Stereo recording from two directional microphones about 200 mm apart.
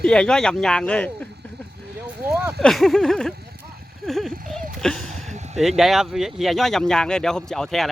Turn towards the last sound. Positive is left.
turn(degrees=0)  # may be behind; listen again after turning